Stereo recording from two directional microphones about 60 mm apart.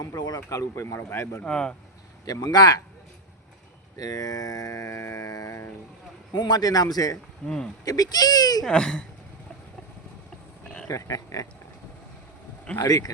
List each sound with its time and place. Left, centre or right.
0.0 s speech: left
1.5 s speech: centre
2.2 s speech: left
3.9 s speech: left
6.6 s speech: left
7.4 s speech: centre
7.9 s speech: left
8.6 s speech: centre
10.8 s speech: left
12.8 s speech: left